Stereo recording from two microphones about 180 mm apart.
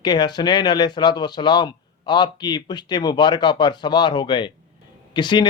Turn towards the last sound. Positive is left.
turn(degrees=25)  # may be behind; listen again after turning